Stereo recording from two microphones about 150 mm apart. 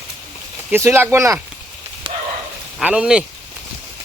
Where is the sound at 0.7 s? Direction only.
15° right (ahead or behind).